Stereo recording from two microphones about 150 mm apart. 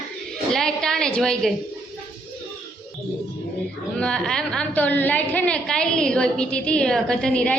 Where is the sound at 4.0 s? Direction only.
5° left (ahead or behind).